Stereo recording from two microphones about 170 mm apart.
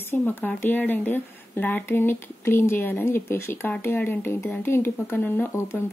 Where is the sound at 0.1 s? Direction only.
10° left (ahead or behind).